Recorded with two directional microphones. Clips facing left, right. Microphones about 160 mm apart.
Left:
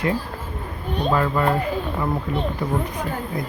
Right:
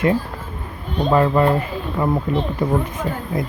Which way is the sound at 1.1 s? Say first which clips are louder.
Right 6 dB; 30° right (ahead or behind).